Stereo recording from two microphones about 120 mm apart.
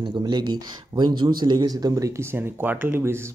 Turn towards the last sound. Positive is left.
turn(degrees=-20)  # may be behind; listen again after turning